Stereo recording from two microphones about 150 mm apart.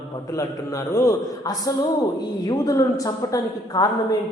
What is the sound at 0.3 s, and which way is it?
A man's voice, 20° left (ahead or behind).